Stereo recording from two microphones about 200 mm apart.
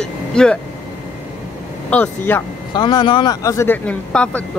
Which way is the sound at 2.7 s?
20° left (ahead or behind).